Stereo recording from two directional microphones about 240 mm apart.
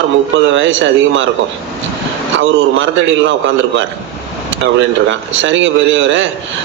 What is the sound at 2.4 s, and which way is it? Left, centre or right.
Speech, right.